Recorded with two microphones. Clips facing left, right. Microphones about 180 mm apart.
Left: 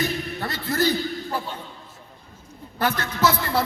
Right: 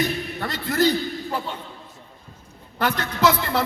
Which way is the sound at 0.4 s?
15° right (ahead or behind).